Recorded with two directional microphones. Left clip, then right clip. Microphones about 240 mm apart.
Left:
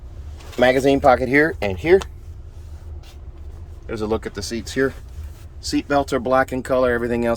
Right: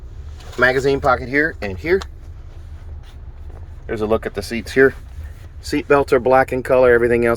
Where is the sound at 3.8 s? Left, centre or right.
Centre.